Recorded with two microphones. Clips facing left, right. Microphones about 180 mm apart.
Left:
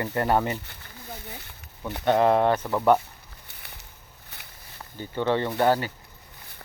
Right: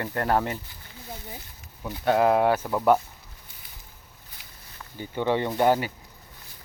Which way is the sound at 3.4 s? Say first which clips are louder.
Left 3 dB; 70° left (ahead or behind).